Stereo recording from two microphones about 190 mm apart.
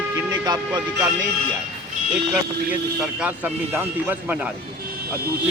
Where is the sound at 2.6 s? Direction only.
5° right (ahead or behind).